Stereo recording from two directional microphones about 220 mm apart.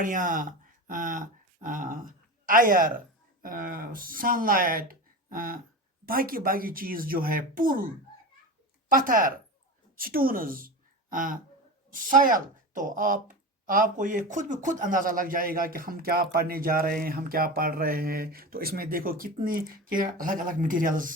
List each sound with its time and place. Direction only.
0.0 s speech: 35° right (ahead or behind)
8.9 s speech: 40° right (ahead or behind)